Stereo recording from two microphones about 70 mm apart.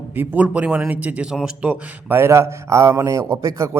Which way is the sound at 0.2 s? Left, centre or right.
Centre.